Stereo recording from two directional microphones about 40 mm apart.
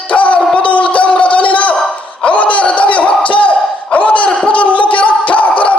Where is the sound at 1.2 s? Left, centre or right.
Left.